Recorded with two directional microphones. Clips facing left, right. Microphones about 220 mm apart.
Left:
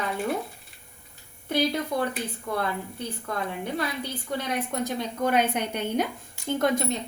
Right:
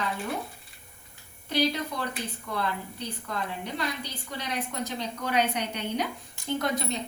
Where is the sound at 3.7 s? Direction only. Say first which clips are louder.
Left 3 dB; 50° left (ahead or behind).